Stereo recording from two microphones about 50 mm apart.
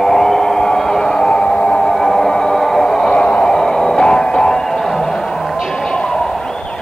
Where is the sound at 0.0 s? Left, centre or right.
Centre.